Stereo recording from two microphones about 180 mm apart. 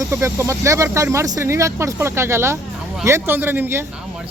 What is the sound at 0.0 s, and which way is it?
Speech, 15° right (ahead or behind).